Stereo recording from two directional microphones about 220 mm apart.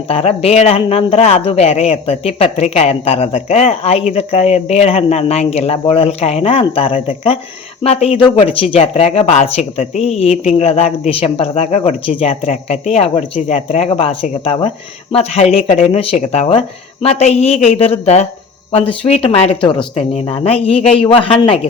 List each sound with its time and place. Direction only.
0.1 s a man's voice: 25° left (ahead or behind)